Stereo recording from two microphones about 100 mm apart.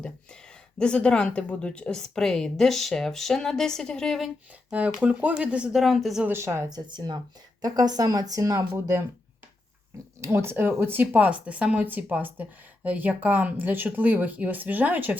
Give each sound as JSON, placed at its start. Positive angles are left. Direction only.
{"t": 0.8, "sound": "a woman's voice", "side_deg": 10}
{"t": 4.7, "sound": "speech", "side_deg": -15}
{"t": 6.2, "sound": "speech", "side_deg": -25}
{"t": 6.7, "sound": "speech", "side_deg": -45}
{"t": 7.6, "sound": "speech", "side_deg": -40}
{"t": 10.2, "sound": "speech", "side_deg": -25}